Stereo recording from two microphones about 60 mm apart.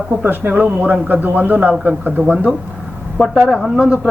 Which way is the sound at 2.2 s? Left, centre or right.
Left.